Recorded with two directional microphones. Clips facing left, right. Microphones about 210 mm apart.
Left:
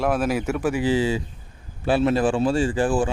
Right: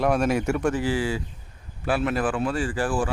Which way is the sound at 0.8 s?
20° left (ahead or behind).